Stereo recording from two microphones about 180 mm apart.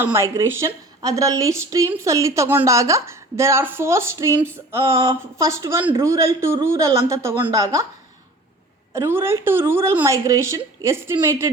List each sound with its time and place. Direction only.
0.0 s a woman's voice: 15° right (ahead or behind)
8.9 s a woman's voice: 15° right (ahead or behind)